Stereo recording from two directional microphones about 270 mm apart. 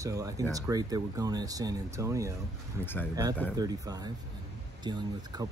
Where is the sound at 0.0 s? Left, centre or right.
Centre.